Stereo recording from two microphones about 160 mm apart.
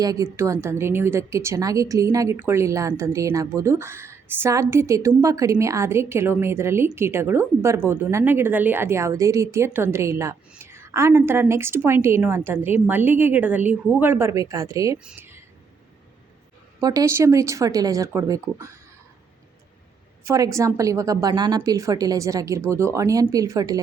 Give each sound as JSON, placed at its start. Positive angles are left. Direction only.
{"t": 0.0, "sound": "a woman's voice", "side_deg": -20}
{"t": 14.9, "sound": "speech", "side_deg": -10}
{"t": 16.8, "sound": "a woman's voice", "side_deg": -20}
{"t": 20.2, "sound": "a woman's voice", "side_deg": -20}